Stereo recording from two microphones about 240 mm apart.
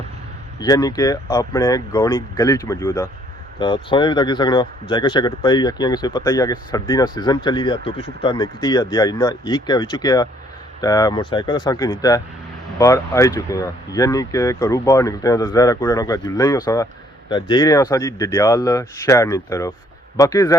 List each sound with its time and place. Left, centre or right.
0.6 s speech: centre